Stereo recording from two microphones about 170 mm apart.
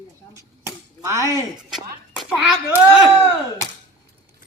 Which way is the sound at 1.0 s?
20° right (ahead or behind).